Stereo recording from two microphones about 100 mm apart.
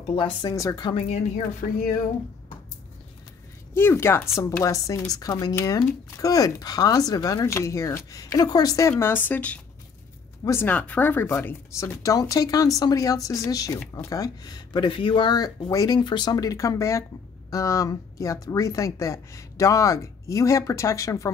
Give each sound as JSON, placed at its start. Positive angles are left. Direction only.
{"t": 0.1, "sound": "speech", "side_deg": 50}
{"t": 3.7, "sound": "speech", "side_deg": 25}
{"t": 9.0, "sound": "speech", "side_deg": 20}
{"t": 10.4, "sound": "speech", "side_deg": 25}
{"t": 10.7, "sound": "speech", "side_deg": 15}
{"t": 11.2, "sound": "speech", "side_deg": 30}
{"t": 16.0, "sound": "speech", "side_deg": 50}